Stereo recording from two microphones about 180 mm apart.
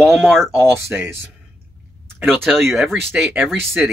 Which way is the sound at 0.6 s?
15° right (ahead or behind).